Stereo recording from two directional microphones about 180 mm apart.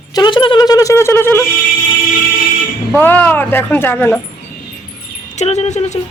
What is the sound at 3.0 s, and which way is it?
Speech, 10° left (ahead or behind).